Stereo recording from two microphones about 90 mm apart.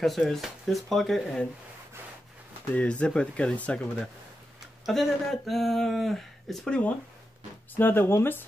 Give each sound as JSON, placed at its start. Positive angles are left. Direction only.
{"t": 0.0, "sound": "speech", "side_deg": 0}
{"t": 2.7, "sound": "speech", "side_deg": 15}
{"t": 4.8, "sound": "speech", "side_deg": 0}
{"t": 7.7, "sound": "speech", "side_deg": 20}